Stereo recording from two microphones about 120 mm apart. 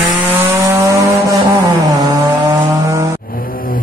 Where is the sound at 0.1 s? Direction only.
15° right (ahead or behind).